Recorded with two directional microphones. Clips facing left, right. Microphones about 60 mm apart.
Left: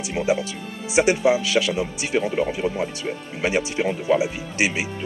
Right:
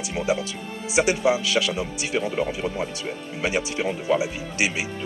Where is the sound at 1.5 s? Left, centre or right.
Left.